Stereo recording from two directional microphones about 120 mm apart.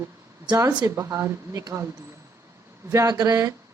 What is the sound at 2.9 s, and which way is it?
Speech, 30° right (ahead or behind).